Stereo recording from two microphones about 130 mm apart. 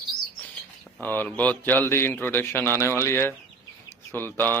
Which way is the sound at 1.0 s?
15° left (ahead or behind).